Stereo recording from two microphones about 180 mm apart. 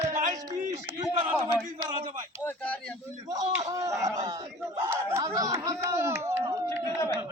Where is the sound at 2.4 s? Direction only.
10° left (ahead or behind).